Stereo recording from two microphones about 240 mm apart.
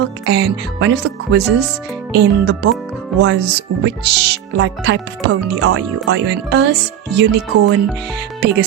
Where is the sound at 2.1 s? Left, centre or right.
Right.